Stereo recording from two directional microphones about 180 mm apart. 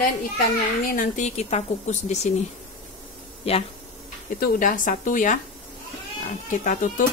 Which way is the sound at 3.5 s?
35° left (ahead or behind).